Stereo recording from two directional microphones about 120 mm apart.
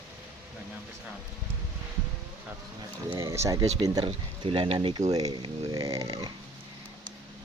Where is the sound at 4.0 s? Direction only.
45° right (ahead or behind).